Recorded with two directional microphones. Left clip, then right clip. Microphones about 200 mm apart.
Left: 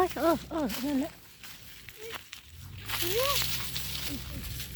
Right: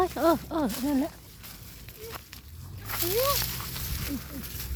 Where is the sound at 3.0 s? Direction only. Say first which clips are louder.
Right 2 dB; 35° right (ahead or behind).